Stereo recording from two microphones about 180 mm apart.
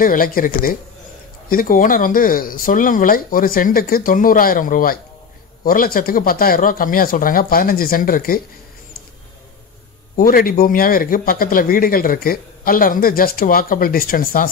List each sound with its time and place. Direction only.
0.0 s speech: 50° left (ahead or behind)
10.1 s speech: 55° left (ahead or behind)